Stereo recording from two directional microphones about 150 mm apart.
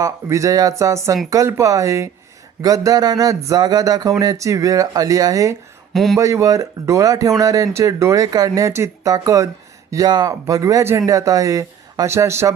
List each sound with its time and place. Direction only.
0.0 s speech: 20° right (ahead or behind)
5.9 s speech: centre (ahead or behind)
6.1 s speech: 20° right (ahead or behind)